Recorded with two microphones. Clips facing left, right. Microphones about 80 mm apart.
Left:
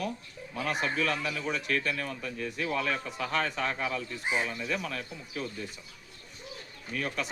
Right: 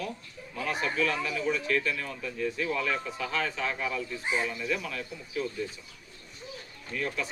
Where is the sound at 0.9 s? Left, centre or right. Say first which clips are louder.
Right 1 dB; left.